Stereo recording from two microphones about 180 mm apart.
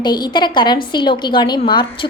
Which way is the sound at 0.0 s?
25° left (ahead or behind).